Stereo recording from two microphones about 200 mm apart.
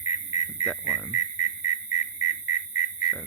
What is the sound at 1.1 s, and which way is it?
Whistle, 40° left (ahead or behind).